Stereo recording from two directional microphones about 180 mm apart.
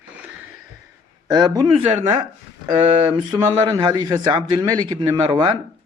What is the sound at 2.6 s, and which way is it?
Speech, 30° right (ahead or behind).